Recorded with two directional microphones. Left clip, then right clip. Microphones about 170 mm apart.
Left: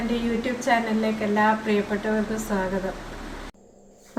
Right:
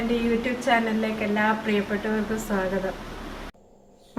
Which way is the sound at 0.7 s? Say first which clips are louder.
Even; 5° left (ahead or behind).